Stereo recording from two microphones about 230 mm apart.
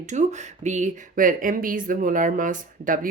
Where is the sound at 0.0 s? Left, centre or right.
Right.